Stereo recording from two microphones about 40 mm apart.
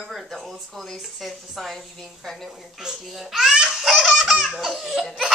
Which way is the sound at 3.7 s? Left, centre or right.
Centre.